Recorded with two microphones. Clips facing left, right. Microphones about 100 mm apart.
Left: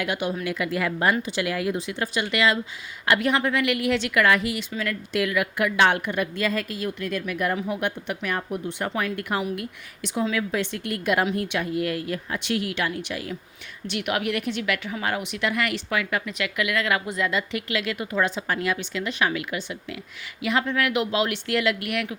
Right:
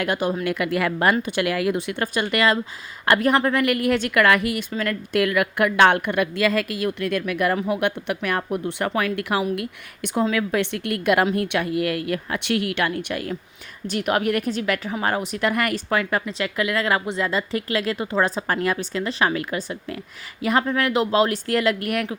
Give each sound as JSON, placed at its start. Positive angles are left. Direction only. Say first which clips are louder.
{"t": 0.0, "sound": "a woman's voice", "louder": "right 4 dB", "side_deg": -45}
{"t": 0.4, "sound": "a woman's voice", "louder": "right 3 dB", "side_deg": -60}
{"t": 13.8, "sound": "speech", "louder": "right 4 dB", "side_deg": -40}